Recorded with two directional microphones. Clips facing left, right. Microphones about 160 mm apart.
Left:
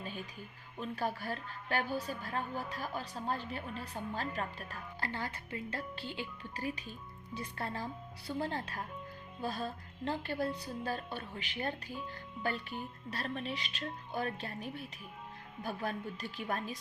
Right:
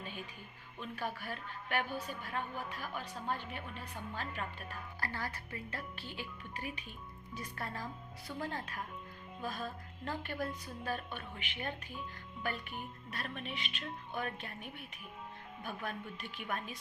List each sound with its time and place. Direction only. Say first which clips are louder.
0.8 s a woman's voice: left 4 dB; 35° left (ahead or behind)
4.9 s a woman's voice: left 2 dB; 25° left (ahead or behind)
13.1 s a woman's voice: left 6 dB; 35° left (ahead or behind)